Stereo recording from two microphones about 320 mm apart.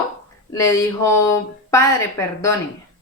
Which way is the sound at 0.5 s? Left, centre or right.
Centre.